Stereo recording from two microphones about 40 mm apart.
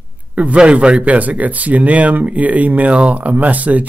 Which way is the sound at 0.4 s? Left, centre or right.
Right.